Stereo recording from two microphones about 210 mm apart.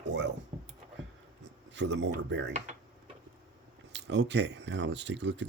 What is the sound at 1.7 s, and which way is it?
Speech, 60° right (ahead or behind).